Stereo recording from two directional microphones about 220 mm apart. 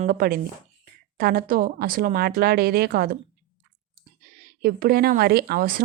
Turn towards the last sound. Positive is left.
turn(degrees=-40)  # may be behind; listen again after turning